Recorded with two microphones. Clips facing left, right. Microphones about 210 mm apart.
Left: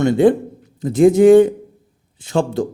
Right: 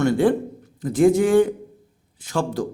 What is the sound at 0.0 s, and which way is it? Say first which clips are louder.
A man's voice: left 5 dB; 20° left (ahead or behind).